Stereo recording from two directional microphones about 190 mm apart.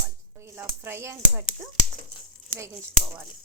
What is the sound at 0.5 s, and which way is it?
Speech, 10° right (ahead or behind).